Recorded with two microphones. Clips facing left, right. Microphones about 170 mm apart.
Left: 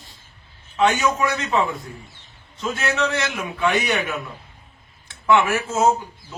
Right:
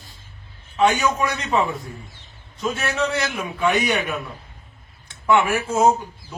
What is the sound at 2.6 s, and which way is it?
A man's voice, 10° right (ahead or behind).